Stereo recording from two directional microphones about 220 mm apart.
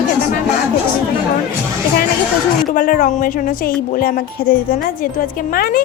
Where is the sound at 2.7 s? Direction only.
35° left (ahead or behind).